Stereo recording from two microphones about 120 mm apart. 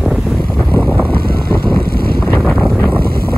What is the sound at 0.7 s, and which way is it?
Wind noise, 15° left (ahead or behind).